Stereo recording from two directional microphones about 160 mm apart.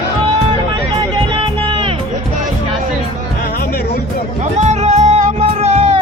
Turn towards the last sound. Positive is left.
turn(degrees=-40)  # may be behind; listen again after turning